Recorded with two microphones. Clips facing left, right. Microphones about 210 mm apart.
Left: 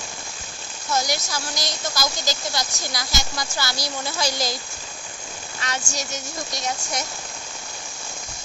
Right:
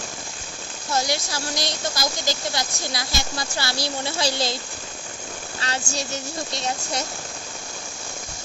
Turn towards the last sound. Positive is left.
turn(degrees=-30)  # may be behind; listen again after turning